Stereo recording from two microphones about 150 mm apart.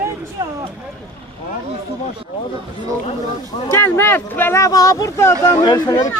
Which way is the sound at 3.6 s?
15° left (ahead or behind).